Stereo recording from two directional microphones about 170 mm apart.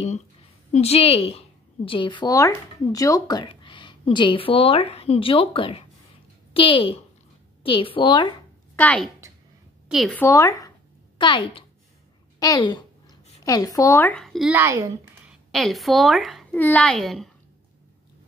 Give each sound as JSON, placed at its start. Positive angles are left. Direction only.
{"t": 0.7, "sound": "a woman's voice", "side_deg": 35}
{"t": 8.7, "sound": "a woman's voice", "side_deg": 5}
{"t": 10.1, "sound": "a woman's voice", "side_deg": 15}
{"t": 11.1, "sound": "a woman's voice", "side_deg": 30}
{"t": 14.5, "sound": "speech", "side_deg": -15}
{"t": 15.5, "sound": "a woman's voice", "side_deg": 0}
{"t": 16.5, "sound": "a woman's voice", "side_deg": 10}